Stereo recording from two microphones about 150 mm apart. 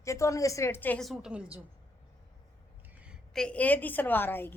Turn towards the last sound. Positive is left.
turn(degrees=15)  # may be behind; listen again after turning